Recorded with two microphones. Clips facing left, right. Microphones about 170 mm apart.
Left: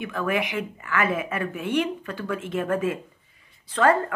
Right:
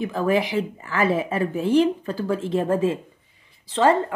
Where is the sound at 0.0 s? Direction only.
30° right (ahead or behind).